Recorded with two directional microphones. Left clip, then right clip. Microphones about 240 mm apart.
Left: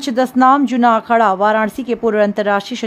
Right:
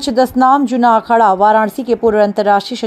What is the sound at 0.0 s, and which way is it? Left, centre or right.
A woman's voice, centre.